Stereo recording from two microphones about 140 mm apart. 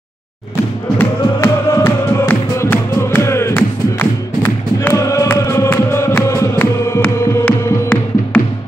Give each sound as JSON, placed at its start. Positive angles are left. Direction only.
{"t": 0.9, "sound": "music", "side_deg": 20}